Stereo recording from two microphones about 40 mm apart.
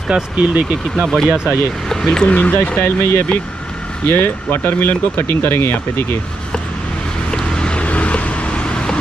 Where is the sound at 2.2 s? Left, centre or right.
Left.